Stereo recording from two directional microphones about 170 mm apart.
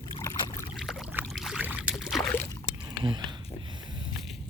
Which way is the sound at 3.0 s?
25° right (ahead or behind).